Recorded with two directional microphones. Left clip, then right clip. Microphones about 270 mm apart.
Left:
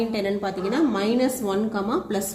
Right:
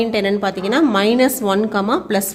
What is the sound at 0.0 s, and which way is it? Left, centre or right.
A woman's voice, right.